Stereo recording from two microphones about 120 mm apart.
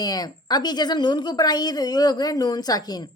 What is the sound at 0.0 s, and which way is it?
Speech, 35° left (ahead or behind).